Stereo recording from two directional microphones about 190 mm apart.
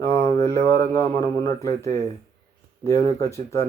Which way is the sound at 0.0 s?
15° left (ahead or behind).